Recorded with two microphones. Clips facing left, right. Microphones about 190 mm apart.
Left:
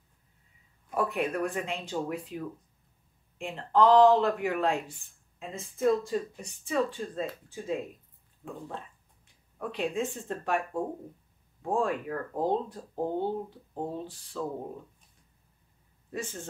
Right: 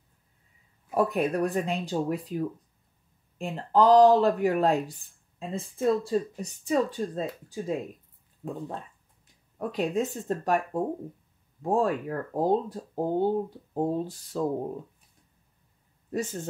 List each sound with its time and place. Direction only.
0.9 s speech: 40° right (ahead or behind)
9.6 s speech: 40° right (ahead or behind)
16.1 s speech: 40° right (ahead or behind)